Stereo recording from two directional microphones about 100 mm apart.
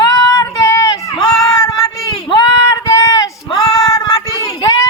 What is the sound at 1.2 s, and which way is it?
Child singing, 5° left (ahead or behind).